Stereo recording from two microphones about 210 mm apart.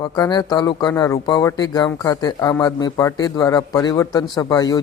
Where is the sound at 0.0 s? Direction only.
20° left (ahead or behind).